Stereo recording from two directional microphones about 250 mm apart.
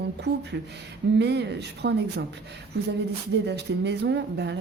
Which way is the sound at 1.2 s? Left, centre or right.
Right.